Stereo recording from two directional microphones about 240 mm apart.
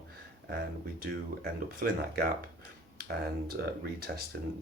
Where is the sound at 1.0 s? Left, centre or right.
Right.